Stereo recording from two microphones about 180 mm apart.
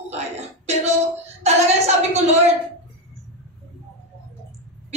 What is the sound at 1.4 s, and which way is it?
Speech, 35° right (ahead or behind).